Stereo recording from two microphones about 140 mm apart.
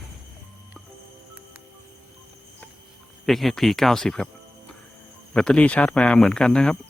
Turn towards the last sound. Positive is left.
turn(degrees=5)  # may be behind; listen again after turning